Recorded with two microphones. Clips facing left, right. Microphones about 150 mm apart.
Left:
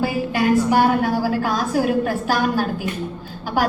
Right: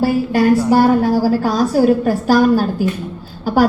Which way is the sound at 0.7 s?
40° right (ahead or behind).